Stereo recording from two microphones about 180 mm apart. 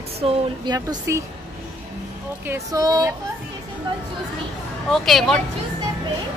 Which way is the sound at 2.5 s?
20° right (ahead or behind).